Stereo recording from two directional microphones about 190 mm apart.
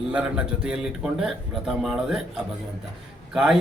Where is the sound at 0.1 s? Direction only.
5° right (ahead or behind).